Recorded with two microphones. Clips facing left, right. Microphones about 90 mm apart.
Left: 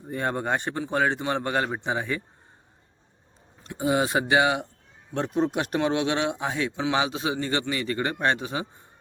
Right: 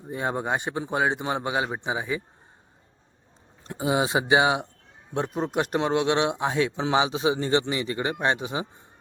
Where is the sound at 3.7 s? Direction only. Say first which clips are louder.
Even; 15° right (ahead or behind).